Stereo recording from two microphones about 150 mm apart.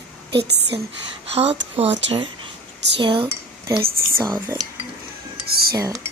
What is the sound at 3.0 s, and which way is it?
Speech, 35° right (ahead or behind).